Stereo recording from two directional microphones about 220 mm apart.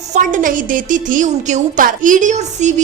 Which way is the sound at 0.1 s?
35° right (ahead or behind).